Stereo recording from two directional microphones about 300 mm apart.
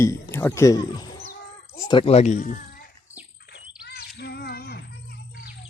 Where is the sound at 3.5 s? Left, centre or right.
Left.